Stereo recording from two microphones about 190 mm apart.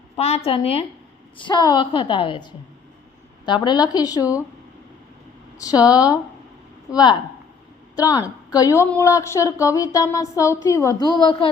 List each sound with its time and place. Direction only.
0.2 s a woman's voice: 35° left (ahead or behind)
5.5 s a woman's voice: 20° left (ahead or behind)